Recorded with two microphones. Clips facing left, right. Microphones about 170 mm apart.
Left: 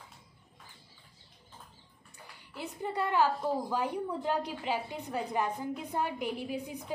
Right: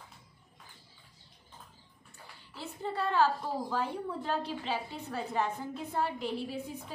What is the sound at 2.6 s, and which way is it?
A woman's voice, 15° left (ahead or behind).